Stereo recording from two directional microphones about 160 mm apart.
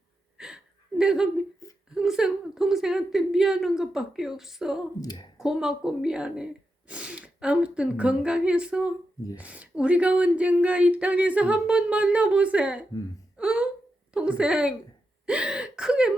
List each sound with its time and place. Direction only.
0.3 s gasp: 5° right (ahead or behind)
2.0 s a woman's voice: 5° right (ahead or behind)
4.9 s speech: 25° left (ahead or behind)
5.4 s a woman's voice: 5° right (ahead or behind)